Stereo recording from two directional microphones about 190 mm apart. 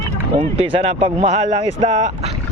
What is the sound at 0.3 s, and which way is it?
Speech, 30° right (ahead or behind).